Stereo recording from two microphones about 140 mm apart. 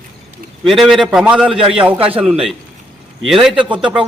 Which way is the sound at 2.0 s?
40° right (ahead or behind).